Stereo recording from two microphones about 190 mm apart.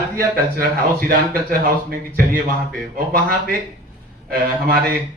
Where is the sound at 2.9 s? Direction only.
50° right (ahead or behind).